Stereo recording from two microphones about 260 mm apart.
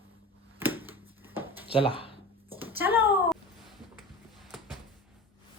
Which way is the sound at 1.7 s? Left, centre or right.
Left.